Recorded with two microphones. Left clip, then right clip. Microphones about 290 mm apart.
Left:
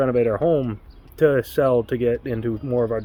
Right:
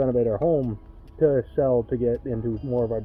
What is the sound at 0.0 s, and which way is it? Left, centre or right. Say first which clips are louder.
Speech: left 3 dB; left.